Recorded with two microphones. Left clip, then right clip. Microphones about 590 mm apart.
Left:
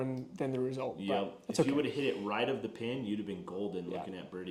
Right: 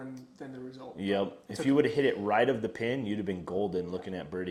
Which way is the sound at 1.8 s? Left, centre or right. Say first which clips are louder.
Right 7 dB; right.